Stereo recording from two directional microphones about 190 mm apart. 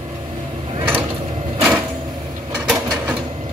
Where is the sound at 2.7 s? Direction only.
5° right (ahead or behind).